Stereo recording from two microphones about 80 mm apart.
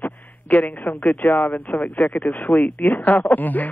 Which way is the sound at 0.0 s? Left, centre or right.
Left.